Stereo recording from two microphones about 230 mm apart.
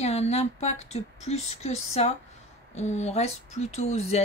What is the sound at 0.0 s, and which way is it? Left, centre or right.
Speech, left.